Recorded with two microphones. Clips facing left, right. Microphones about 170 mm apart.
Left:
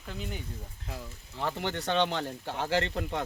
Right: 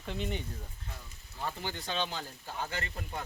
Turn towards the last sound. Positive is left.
turn(degrees=85)